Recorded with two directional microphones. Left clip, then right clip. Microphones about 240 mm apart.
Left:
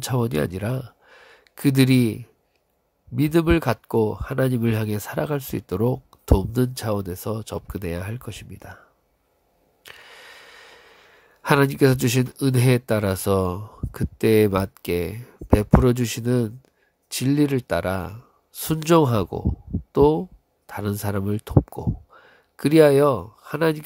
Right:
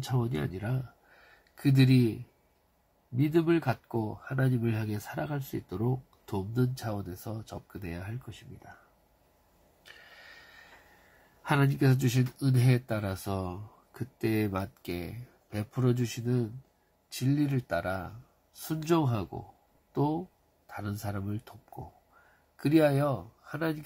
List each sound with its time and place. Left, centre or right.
0.0 s speech: left
3.2 s speech: left
9.8 s a sound: left
11.4 s speech: left
22.6 s speech: left